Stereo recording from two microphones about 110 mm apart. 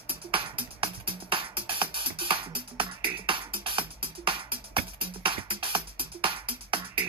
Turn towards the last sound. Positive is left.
turn(degrees=-50)  # may be behind; listen again after turning